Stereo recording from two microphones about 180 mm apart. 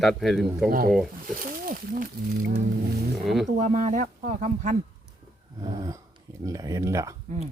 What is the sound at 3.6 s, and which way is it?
Speech, 45° right (ahead or behind).